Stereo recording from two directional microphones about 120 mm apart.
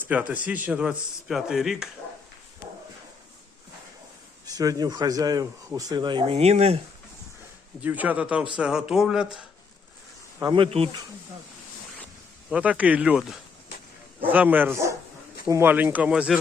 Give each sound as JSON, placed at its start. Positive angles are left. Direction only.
{"t": 0.1, "sound": "speech", "side_deg": -10}
{"t": 4.4, "sound": "speech", "side_deg": -30}
{"t": 6.3, "sound": "speech", "side_deg": -60}
{"t": 7.8, "sound": "speech", "side_deg": -15}
{"t": 10.4, "sound": "speech", "side_deg": -45}
{"t": 12.5, "sound": "speech", "side_deg": -10}
{"t": 14.2, "sound": "speech", "side_deg": -15}